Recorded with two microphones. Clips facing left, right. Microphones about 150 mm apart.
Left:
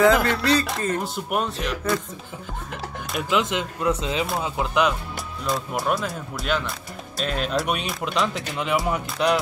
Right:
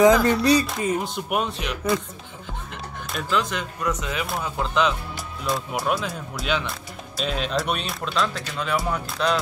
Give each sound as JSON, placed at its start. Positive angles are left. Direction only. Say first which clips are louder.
{"t": 0.0, "sound": "music", "louder": "right 2 dB", "side_deg": -20}
{"t": 0.7, "sound": "speech", "louder": "right 1 dB", "side_deg": -5}
{"t": 3.3, "sound": "speech", "louder": "left 2 dB", "side_deg": 20}
{"t": 4.4, "sound": "speech", "louder": "right 1 dB", "side_deg": 10}
{"t": 5.5, "sound": "speech", "louder": "even", "side_deg": 0}
{"t": 8.0, "sound": "speech", "louder": "left 1 dB", "side_deg": 20}